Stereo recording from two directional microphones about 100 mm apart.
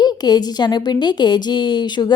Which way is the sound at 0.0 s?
45° left (ahead or behind).